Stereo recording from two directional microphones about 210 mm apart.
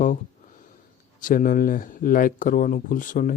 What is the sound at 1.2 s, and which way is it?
Speech, 40° left (ahead or behind).